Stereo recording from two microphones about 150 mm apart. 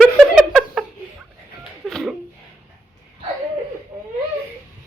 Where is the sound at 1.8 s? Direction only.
Centre (ahead or behind).